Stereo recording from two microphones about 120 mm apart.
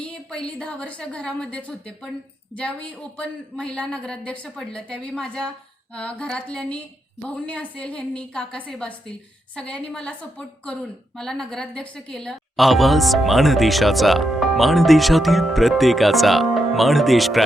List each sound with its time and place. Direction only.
0.0 s a woman's voice: 5° left (ahead or behind)